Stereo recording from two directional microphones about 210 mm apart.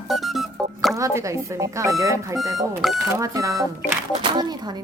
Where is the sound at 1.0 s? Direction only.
15° right (ahead or behind).